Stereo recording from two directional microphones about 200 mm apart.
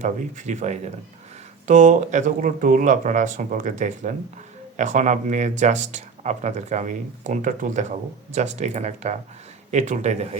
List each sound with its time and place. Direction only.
0.0 s speech: 35° right (ahead or behind)